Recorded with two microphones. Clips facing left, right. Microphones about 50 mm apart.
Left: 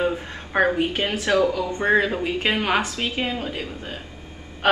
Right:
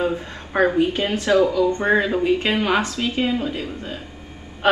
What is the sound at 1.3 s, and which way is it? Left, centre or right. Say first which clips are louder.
Speech: right 3 dB; left.